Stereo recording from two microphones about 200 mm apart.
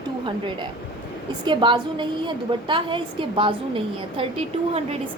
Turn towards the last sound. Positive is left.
turn(degrees=-30)  # may be behind; listen again after turning